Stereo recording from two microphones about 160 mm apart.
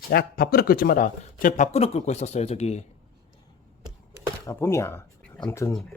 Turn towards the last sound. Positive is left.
turn(degrees=20)  # may be behind; listen again after turning